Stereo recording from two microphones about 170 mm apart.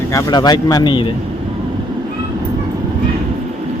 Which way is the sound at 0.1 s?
20° left (ahead or behind).